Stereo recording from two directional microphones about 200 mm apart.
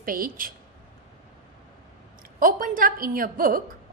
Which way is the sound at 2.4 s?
45° right (ahead or behind).